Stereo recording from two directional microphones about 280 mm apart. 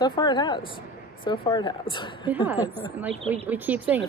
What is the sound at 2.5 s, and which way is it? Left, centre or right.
A woman's voice, centre.